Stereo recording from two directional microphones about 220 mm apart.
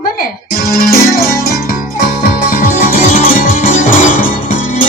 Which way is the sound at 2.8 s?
35° left (ahead or behind).